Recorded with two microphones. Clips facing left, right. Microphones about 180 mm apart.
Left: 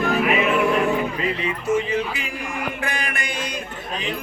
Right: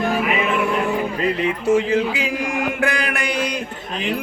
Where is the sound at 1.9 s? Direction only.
90° right.